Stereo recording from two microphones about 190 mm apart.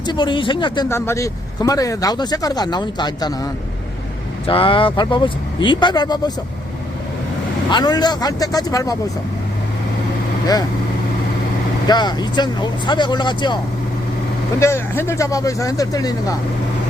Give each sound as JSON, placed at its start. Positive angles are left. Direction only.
{"t": 0.0, "sound": "speech", "side_deg": 25}
{"t": 0.9, "sound": "speech", "side_deg": 15}
{"t": 7.7, "sound": "speech", "side_deg": 20}
{"t": 11.9, "sound": "speech", "side_deg": 20}
{"t": 14.6, "sound": "speech", "side_deg": 15}